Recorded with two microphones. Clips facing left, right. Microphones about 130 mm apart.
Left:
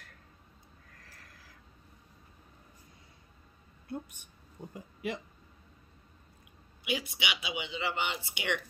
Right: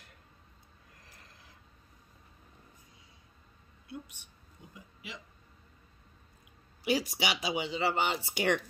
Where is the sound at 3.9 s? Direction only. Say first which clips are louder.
Left 5 dB; 45° left (ahead or behind).